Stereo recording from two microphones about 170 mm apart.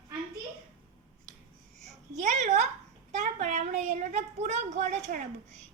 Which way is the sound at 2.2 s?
45° right (ahead or behind).